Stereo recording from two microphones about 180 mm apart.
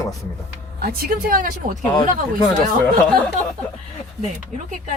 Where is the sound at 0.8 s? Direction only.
55° right (ahead or behind).